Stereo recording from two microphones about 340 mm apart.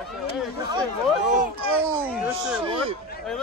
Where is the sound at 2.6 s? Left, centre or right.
Centre.